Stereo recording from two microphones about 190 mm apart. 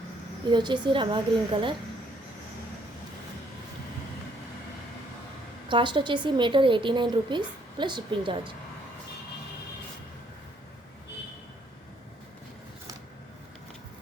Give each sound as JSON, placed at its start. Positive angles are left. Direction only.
{"t": 0.5, "sound": "a woman's voice", "side_deg": -25}
{"t": 5.6, "sound": "a woman's voice", "side_deg": -25}